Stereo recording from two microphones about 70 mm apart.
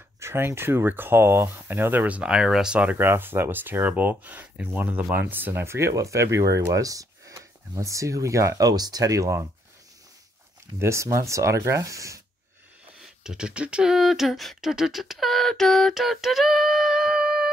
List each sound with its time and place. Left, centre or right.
0.2 s speech: right; by 2.3 s centre
2.3 s speech: centre
3.0 s speech: right
5.9 s speech: right
10.8 s speech: right
13.0 s speech: centre